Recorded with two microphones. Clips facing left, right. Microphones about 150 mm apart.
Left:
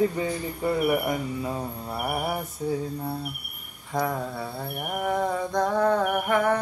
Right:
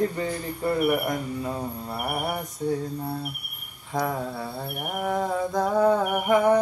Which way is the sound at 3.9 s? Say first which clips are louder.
Even; centre (ahead or behind).